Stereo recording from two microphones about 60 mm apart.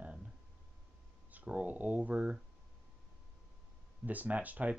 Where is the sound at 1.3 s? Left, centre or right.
Right.